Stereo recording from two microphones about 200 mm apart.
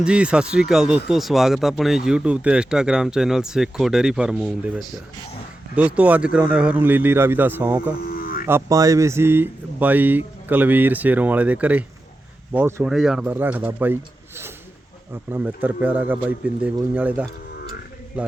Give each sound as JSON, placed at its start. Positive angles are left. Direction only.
{"t": 0.0, "sound": "speech", "side_deg": -5}
{"t": 8.0, "sound": "music", "side_deg": 50}
{"t": 8.4, "sound": "speech", "side_deg": -15}